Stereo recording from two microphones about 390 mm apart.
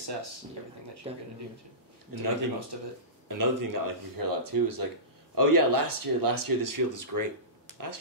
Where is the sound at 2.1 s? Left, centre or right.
Right.